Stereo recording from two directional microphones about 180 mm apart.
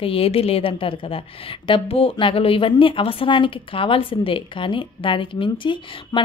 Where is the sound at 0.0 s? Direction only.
30° left (ahead or behind).